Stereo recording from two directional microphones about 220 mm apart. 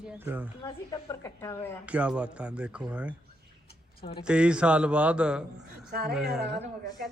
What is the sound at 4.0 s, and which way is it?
Speech, 25° left (ahead or behind).